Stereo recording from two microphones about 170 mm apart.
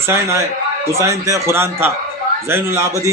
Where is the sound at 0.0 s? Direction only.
15° right (ahead or behind).